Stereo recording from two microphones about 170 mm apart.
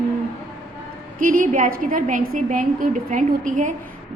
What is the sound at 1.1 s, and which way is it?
A woman's voice, 55° right (ahead or behind).